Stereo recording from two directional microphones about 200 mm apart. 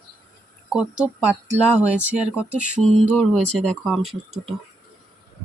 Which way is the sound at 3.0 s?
5° left (ahead or behind).